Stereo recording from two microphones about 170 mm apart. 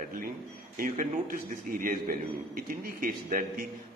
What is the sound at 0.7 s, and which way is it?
A man's voice, 50° right (ahead or behind).